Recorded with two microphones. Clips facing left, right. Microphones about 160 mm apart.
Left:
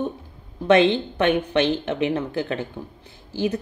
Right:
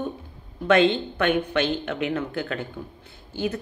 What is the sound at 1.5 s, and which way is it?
Speech, 25° left (ahead or behind).